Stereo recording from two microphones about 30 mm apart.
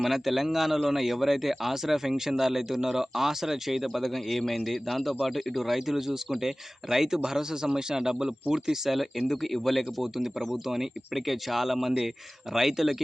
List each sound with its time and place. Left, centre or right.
0.0 s speech: centre
8.9 s speech: centre
10.5 s speech: centre